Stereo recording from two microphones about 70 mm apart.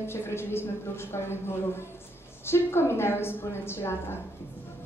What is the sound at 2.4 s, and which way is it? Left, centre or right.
A woman's voice, left.